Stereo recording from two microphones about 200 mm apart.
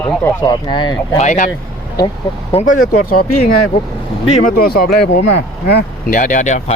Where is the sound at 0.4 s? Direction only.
20° left (ahead or behind).